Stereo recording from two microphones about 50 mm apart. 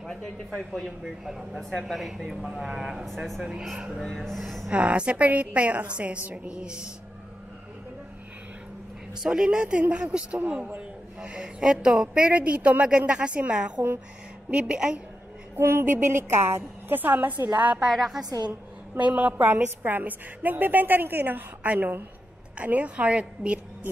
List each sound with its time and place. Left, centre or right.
0.0 s speech: centre
1.0 s speech: centre
4.0 s speech: centre
4.6 s a woman's voice: right
9.2 s a woman's voice: centre; by 10.8 s right
11.1 s speech: centre
12.3 s a woman's voice: right
15.5 s a woman's voice: right
16.9 s a woman's voice: right
17.8 s speech: centre
18.9 s a woman's voice: right
22.6 s a woman's voice: right